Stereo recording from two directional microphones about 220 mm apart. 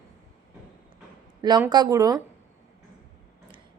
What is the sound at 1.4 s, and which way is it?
Speech, 20° right (ahead or behind).